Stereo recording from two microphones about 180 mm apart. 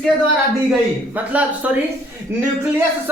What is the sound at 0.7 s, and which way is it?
Speech, 10° right (ahead or behind).